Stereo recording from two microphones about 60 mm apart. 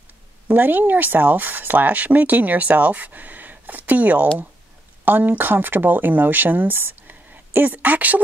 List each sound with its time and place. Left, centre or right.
0.5 s speech: right